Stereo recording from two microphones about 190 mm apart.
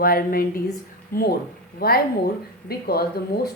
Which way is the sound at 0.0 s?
50° left (ahead or behind).